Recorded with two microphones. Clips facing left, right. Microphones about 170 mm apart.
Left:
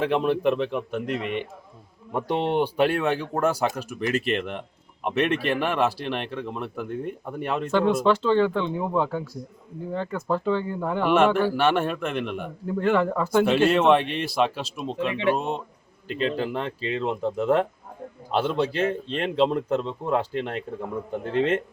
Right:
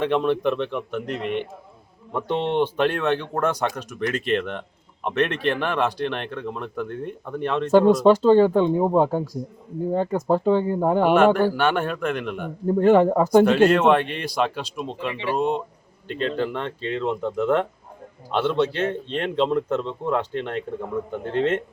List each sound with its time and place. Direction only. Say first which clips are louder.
0.0 s speech: right 1 dB; 5° left (ahead or behind)
0.8 s a man's voice: even; 35° left (ahead or behind)
1.0 s speech: right 1 dB; 5° left (ahead or behind)
7.7 s speech: right 6 dB; 40° right (ahead or behind)
11.3 s speech: right 1 dB; centre (ahead or behind)
12.6 s speech: right 7 dB; 40° right (ahead or behind)
13.7 s speech: right 1 dB; centre (ahead or behind)